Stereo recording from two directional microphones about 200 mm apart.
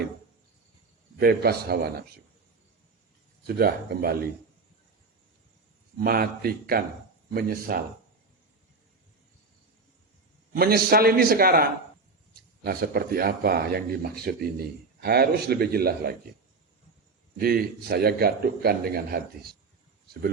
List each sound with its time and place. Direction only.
1.2 s speech: 50° right (ahead or behind)
3.4 s speech: 50° right (ahead or behind)
6.0 s speech: 50° right (ahead or behind)
10.5 s speech: 50° right (ahead or behind)
17.3 s speech: 50° right (ahead or behind)